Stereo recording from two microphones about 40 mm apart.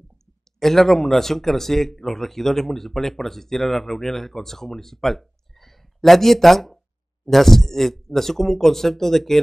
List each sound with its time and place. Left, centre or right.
0.6 s speech: centre